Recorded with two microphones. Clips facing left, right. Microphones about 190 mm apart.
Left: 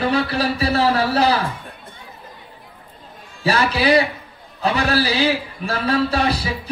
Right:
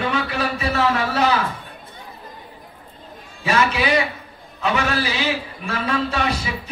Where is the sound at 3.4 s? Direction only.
35° left (ahead or behind).